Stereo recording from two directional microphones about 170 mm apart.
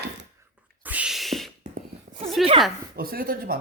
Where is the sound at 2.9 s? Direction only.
60° right (ahead or behind).